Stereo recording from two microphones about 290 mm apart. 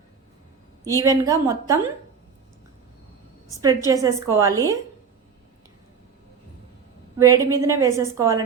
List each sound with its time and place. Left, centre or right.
0.9 s a woman's voice: centre
3.6 s a woman's voice: centre
7.2 s a woman's voice: centre